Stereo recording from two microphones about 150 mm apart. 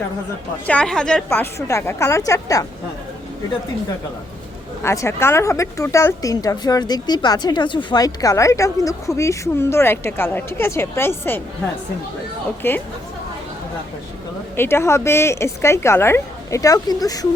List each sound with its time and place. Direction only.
0.7 s speech: 5° left (ahead or behind); by 2.6 s 20° left (ahead or behind)
4.8 s speech: 15° left (ahead or behind)
12.6 s a woman's voice: 15° left (ahead or behind)
14.5 s a woman's voice: 15° left (ahead or behind)